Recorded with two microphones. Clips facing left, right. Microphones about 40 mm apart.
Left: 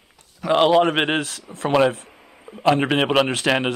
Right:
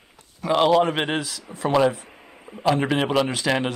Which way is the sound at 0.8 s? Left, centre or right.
Left.